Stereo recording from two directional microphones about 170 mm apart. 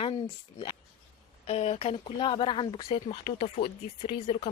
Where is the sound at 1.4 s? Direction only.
35° left (ahead or behind).